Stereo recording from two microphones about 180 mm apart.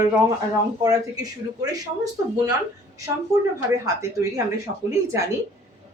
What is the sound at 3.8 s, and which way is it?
Speech, 20° right (ahead or behind).